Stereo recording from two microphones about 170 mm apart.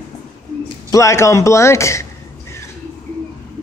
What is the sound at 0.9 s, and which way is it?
A man's voice, 15° left (ahead or behind).